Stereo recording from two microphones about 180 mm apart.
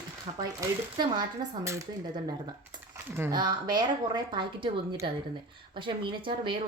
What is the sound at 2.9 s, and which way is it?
Speech, 15° right (ahead or behind).